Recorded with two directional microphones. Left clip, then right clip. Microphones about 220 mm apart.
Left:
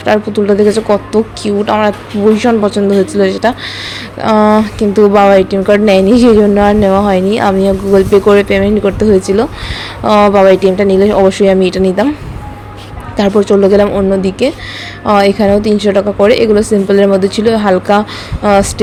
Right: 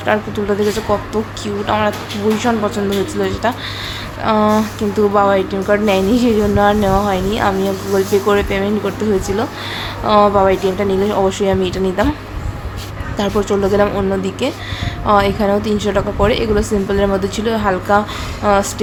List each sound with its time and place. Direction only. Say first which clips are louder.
0.0 s a woman's voice: left 6 dB; 25° left (ahead or behind)
13.1 s a woman's voice: left 8 dB; 25° left (ahead or behind)